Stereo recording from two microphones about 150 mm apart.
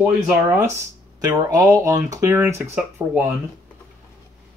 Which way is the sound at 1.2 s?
25° right (ahead or behind).